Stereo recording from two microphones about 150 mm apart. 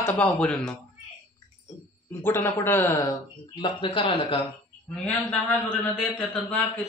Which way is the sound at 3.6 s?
30° left (ahead or behind).